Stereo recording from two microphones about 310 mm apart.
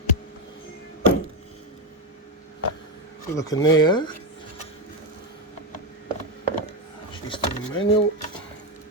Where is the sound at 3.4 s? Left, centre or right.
Centre.